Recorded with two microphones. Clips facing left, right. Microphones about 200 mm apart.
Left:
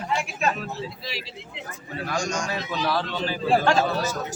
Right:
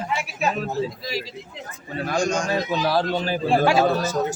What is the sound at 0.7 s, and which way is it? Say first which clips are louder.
Speech: right 7 dB; 40° right (ahead or behind).